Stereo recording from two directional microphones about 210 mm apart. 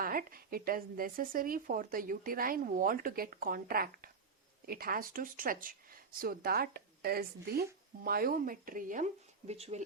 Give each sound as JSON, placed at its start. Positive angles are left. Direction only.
{"t": 0.0, "sound": "speech", "side_deg": -45}